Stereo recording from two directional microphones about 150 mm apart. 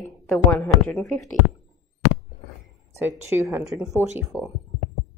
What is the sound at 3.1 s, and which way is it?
Speech, 15° right (ahead or behind).